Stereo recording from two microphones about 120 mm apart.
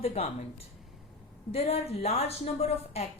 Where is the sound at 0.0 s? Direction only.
55° left (ahead or behind).